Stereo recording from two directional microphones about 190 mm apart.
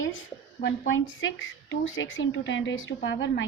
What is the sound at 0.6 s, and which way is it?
A woman's voice, 90° left.